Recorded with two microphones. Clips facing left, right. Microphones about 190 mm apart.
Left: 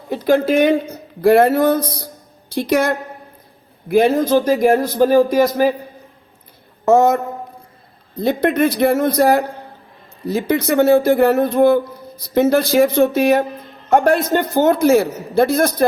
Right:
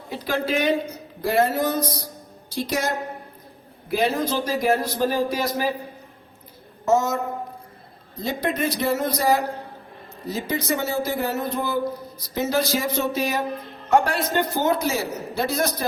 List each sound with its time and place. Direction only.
0.1 s a man's voice: 50° left (ahead or behind)
6.8 s speech: 60° left (ahead or behind)
8.2 s a man's voice: 60° left (ahead or behind)